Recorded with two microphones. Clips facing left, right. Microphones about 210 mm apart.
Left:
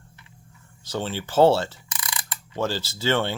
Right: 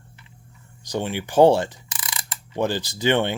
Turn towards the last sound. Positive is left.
turn(degrees=-15)  # may be behind; listen again after turning